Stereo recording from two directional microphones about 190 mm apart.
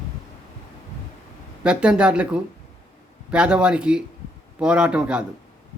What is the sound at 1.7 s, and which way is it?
A man's voice, 5° right (ahead or behind).